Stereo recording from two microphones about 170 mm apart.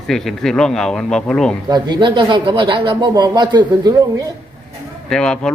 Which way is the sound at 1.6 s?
25° right (ahead or behind).